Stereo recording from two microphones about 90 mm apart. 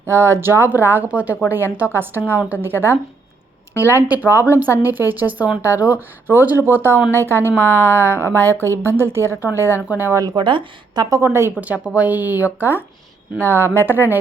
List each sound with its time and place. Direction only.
0.0 s a woman's voice: 30° right (ahead or behind)
1.0 s a woman's voice: 15° right (ahead or behind)
10.3 s a woman's voice: 65° right (ahead or behind)
11.2 s a woman's voice: 25° right (ahead or behind)
11.6 s a woman's voice: 15° right (ahead or behind)